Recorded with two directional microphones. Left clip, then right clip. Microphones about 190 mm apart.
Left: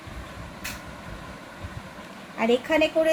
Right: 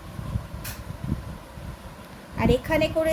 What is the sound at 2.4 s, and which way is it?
Speech, centre (ahead or behind).